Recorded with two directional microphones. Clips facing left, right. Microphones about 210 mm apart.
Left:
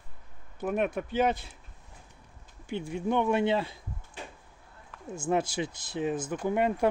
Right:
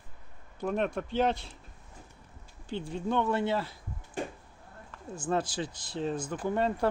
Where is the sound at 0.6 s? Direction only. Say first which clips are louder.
Left 1 dB; 10° left (ahead or behind).